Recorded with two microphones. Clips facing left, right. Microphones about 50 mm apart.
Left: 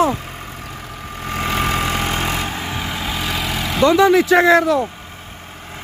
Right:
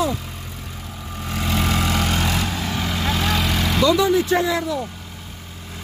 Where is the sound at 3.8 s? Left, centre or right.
Left.